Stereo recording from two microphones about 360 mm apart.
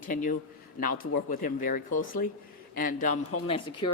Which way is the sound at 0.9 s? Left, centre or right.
Left.